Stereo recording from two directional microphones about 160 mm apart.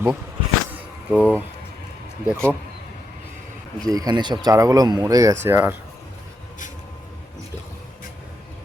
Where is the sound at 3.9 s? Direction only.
25° right (ahead or behind).